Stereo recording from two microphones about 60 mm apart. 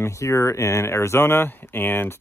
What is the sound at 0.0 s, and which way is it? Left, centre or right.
Speech, left.